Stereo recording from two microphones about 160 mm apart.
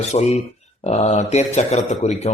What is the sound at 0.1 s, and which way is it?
A man's voice, 45° left (ahead or behind).